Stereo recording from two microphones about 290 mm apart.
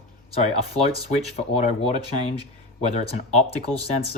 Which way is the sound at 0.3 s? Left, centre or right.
Left.